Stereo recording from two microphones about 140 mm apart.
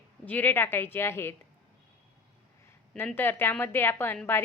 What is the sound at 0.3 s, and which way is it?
A woman's voice, 15° left (ahead or behind).